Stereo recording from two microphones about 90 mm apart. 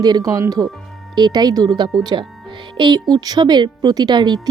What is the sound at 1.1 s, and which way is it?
A woman's voice, 55° right (ahead or behind).